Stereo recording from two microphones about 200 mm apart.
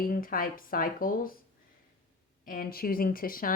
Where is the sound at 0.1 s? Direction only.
45° left (ahead or behind).